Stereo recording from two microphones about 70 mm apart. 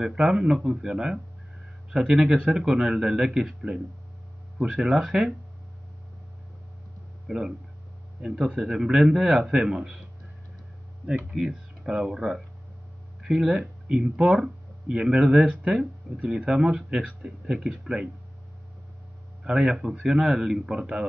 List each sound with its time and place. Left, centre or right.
0.0 s speech: centre
7.2 s speech: centre
11.3 s speech: centre
19.4 s speech: centre